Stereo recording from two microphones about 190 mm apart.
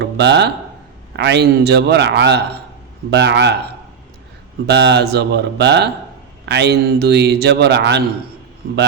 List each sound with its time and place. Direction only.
0.0 s a man's voice: 60° right (ahead or behind)
4.6 s a man's voice: 60° right (ahead or behind)